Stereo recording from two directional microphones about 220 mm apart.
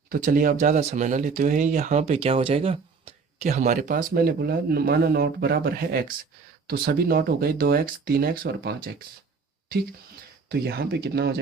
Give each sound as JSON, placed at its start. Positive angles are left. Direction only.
{"t": 0.1, "sound": "speech", "side_deg": -40}
{"t": 10.5, "sound": "speech", "side_deg": -45}